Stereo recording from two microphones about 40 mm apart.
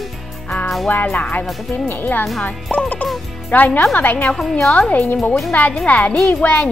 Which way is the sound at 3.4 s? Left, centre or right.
Left.